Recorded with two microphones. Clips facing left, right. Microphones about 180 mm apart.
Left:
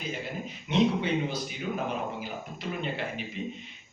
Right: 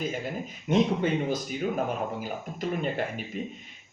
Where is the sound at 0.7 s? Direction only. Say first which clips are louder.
Right 2 dB; 45° right (ahead or behind).